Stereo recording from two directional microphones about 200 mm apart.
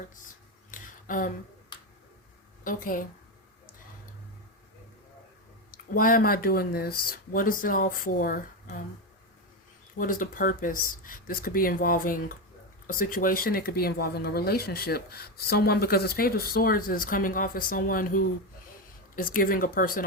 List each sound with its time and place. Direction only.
0.7 s a sound: 40° left (ahead or behind)
2.6 s speech: 45° left (ahead or behind)
5.7 s speech: 45° left (ahead or behind)
10.0 s speech: 45° left (ahead or behind)